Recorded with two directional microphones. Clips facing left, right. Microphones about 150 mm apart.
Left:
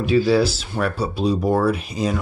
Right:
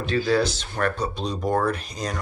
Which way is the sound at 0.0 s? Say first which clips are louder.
Left 5 dB; 10° left (ahead or behind).